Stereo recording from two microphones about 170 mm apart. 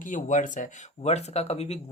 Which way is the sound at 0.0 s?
50° left (ahead or behind).